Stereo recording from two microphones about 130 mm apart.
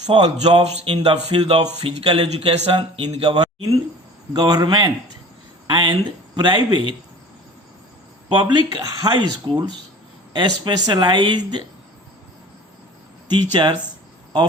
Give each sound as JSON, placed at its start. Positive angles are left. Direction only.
{"t": 0.1, "sound": "speech", "side_deg": -45}
{"t": 1.8, "sound": "speech", "side_deg": -45}
{"t": 4.4, "sound": "speech", "side_deg": -30}
{"t": 8.3, "sound": "speech", "side_deg": -35}
{"t": 13.3, "sound": "speech", "side_deg": -35}